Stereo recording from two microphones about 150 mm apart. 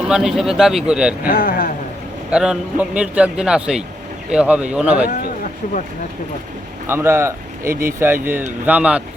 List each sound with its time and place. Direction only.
0.1 s a man's voice: centre (ahead or behind)
1.3 s speech: 80° left
2.3 s a man's voice: 5° right (ahead or behind)
6.8 s speech: 15° right (ahead or behind)